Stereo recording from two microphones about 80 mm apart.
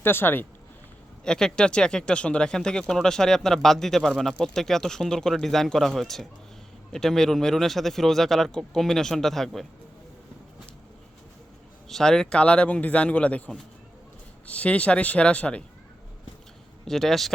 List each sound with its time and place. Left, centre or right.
0.0 s speech: left
1.2 s a man's voice: centre
11.9 s speech: centre
16.8 s a man's voice: centre